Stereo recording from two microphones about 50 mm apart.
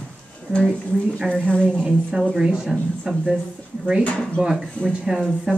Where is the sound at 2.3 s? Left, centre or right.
Centre.